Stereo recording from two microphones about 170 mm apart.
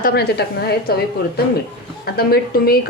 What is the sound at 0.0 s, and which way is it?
Speech, 70° left (ahead or behind).